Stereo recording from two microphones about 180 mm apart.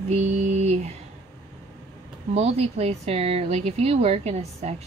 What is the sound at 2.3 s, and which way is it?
Speech, 35° right (ahead or behind).